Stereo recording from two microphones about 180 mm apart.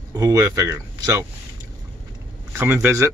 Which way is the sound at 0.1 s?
20° right (ahead or behind).